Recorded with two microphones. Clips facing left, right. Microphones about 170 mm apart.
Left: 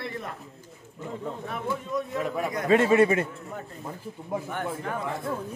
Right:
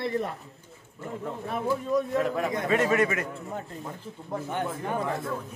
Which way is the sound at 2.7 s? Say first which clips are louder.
Left 6 dB; 30° left (ahead or behind).